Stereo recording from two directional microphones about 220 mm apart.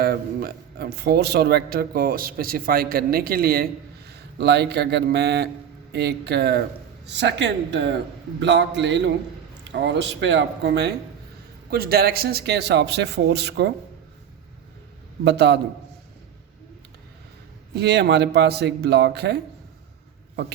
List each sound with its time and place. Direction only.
0.0 s a man's voice: 45° right (ahead or behind)
15.2 s a man's voice: 50° right (ahead or behind)
17.7 s a man's voice: 50° right (ahead or behind)